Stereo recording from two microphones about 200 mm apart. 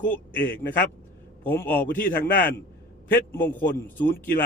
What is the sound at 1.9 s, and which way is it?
Speech, 45° left (ahead or behind).